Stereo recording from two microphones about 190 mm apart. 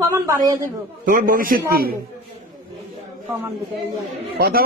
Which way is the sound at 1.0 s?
45° right (ahead or behind).